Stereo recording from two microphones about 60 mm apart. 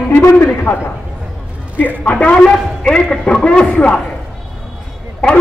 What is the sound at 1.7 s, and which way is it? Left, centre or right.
A man's voice, left.